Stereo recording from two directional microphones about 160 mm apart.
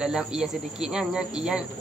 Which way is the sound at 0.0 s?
5° right (ahead or behind).